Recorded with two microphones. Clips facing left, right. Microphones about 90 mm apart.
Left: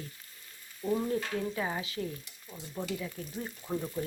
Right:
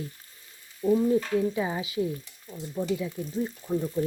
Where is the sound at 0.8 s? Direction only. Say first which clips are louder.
Right 8 dB; 20° right (ahead or behind).